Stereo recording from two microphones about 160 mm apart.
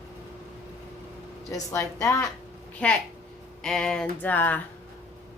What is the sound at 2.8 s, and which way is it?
Speech, 5° left (ahead or behind).